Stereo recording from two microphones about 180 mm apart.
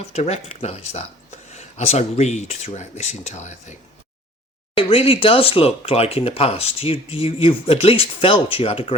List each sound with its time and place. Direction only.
0.0 s speech: 35° left (ahead or behind)
4.8 s speech: 30° left (ahead or behind)